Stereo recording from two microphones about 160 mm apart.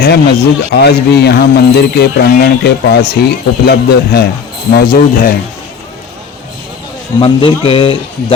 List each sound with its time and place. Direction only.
0.0 s speech: 90° left
4.7 s speech: 75° left (ahead or behind)
7.2 s speech: 35° left (ahead or behind)